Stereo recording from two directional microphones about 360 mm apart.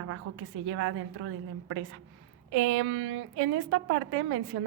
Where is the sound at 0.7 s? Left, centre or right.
Right.